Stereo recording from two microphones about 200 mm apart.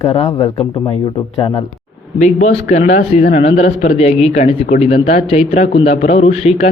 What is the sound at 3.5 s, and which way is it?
A man's voice, 35° left (ahead or behind).